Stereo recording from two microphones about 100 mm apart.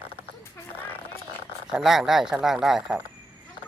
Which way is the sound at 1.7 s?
Centre (ahead or behind).